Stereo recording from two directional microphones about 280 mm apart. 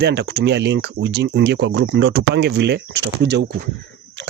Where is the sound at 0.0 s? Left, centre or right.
Right.